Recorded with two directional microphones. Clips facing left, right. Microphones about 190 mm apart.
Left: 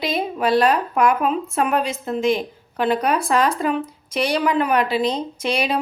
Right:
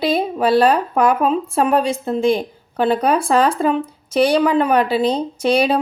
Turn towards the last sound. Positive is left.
turn(degrees=-30)  # may be behind; listen again after turning